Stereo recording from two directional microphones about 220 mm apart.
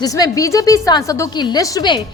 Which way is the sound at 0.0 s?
15° left (ahead or behind).